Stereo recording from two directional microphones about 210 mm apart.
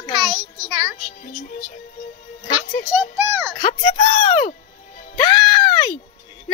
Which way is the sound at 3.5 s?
25° left (ahead or behind).